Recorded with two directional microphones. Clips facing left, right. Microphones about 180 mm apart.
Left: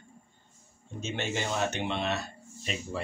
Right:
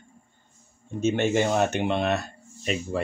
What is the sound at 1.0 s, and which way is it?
Speech, 50° right (ahead or behind).